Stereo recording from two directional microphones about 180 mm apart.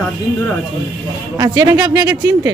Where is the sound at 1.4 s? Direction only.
20° right (ahead or behind).